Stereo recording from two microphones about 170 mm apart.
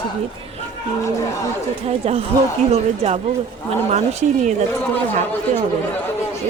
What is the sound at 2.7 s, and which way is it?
Speech, 40° right (ahead or behind).